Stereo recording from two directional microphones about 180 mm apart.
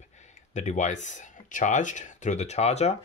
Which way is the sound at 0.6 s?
40° left (ahead or behind).